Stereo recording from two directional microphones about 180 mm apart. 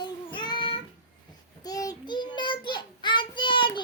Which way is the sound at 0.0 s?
25° left (ahead or behind).